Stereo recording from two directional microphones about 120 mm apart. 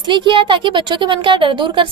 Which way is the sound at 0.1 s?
45° right (ahead or behind).